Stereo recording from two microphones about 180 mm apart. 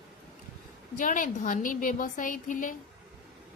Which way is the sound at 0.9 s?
50° left (ahead or behind).